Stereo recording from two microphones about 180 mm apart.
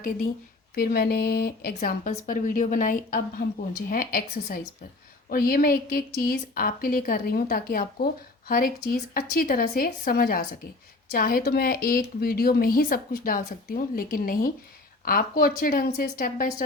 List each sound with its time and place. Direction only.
0.8 s a woman's voice: 60° left (ahead or behind)